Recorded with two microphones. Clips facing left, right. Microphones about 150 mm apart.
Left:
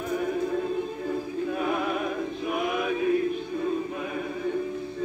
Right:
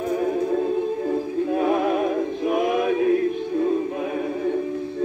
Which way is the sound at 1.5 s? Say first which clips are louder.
Right 7 dB; 50° right (ahead or behind).